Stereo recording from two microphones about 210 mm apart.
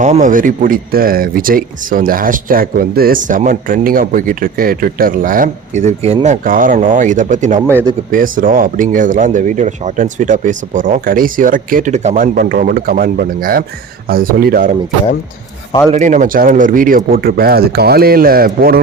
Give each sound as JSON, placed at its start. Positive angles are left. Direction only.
{"t": 0.0, "sound": "speech", "side_deg": -35}
{"t": 7.7, "sound": "speech", "side_deg": -10}
{"t": 8.1, "sound": "speech", "side_deg": -40}
{"t": 15.9, "sound": "speech", "side_deg": -35}